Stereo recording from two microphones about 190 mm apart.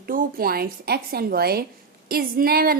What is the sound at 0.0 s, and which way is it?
A woman's voice, 50° right (ahead or behind).